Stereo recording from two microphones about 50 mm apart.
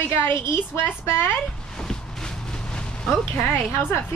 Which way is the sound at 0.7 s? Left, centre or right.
Left.